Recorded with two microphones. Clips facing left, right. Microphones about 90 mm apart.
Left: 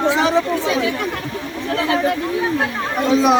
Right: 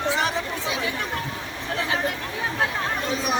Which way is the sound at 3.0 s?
90° left.